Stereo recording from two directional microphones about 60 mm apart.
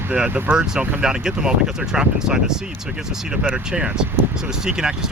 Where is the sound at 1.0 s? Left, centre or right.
Centre.